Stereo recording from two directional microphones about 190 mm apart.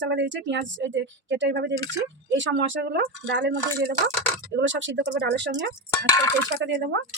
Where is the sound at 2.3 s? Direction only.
75° right (ahead or behind); by 4.0 s 60° right (ahead or behind).